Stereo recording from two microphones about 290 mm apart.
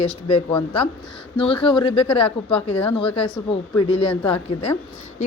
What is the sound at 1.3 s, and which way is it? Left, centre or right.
Speech, centre.